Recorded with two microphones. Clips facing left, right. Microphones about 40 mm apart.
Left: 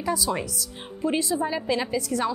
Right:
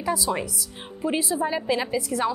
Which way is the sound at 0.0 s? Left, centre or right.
Centre.